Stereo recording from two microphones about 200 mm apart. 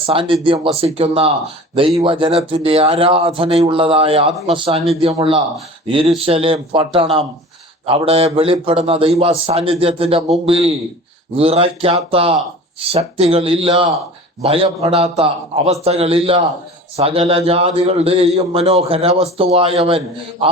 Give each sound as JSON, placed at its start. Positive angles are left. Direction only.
{"t": 0.0, "sound": "a man's voice", "side_deg": -25}